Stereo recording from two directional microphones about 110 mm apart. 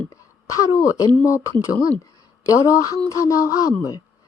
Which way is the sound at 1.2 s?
30° left (ahead or behind).